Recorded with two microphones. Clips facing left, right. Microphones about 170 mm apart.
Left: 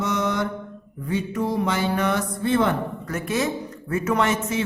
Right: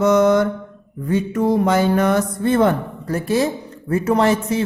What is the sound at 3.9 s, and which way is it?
Speech, 35° right (ahead or behind).